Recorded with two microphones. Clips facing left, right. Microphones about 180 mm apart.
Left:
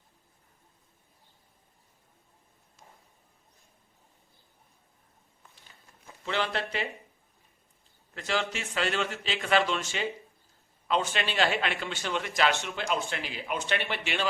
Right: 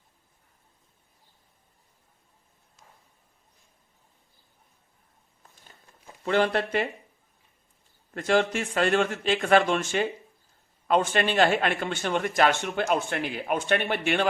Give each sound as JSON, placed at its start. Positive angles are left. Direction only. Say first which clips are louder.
{"t": 6.2, "sound": "a man's voice", "louder": "right 7 dB", "side_deg": -50}
{"t": 8.1, "sound": "a man's voice", "louder": "right 8 dB", "side_deg": -50}